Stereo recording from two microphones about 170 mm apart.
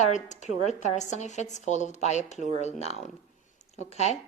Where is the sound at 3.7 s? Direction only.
40° left (ahead or behind).